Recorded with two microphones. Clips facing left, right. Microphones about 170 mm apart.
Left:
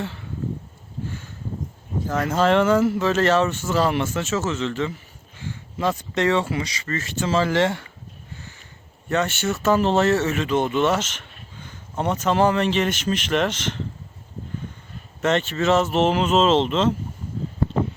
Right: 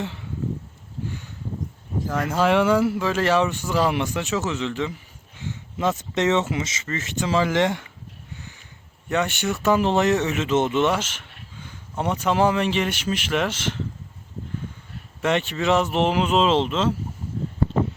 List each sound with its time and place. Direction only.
0.0 s a sound: 15° right (ahead or behind)
2.0 s speech: 10° right (ahead or behind)
9.0 s speech: 15° right (ahead or behind)
15.2 s speech: 15° right (ahead or behind)